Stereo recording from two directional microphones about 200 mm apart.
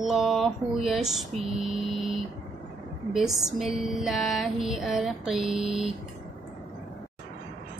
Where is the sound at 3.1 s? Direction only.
Centre (ahead or behind).